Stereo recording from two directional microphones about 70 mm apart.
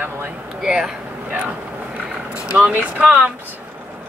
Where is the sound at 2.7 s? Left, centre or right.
Centre.